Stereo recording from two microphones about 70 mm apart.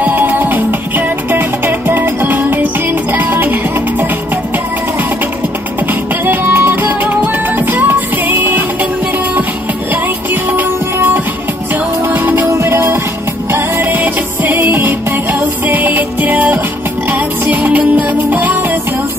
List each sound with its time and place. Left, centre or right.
0.2 s music: right
5.9 s music: right
10.3 s music: right
17.7 s music: right